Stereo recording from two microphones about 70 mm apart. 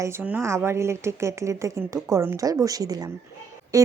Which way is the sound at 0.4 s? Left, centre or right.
Right.